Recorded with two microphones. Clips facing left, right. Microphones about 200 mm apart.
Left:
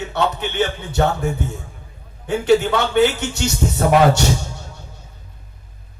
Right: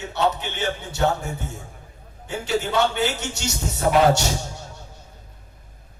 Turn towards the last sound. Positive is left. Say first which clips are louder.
# left 3 dB
turn(degrees=60)  # may be behind; listen again after turning